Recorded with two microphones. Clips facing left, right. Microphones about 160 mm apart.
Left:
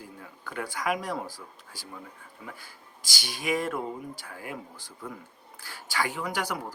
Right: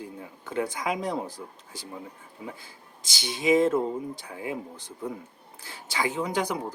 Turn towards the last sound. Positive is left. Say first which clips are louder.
# right 4 dB
turn(degrees=-20)  # may be behind; listen again after turning